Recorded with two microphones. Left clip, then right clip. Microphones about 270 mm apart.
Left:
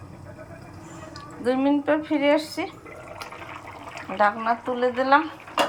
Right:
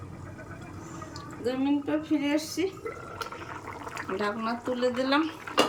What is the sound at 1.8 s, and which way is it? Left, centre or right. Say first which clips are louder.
Speech: left 8 dB; left.